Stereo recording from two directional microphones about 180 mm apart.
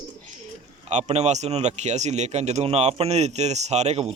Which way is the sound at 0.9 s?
40° right (ahead or behind).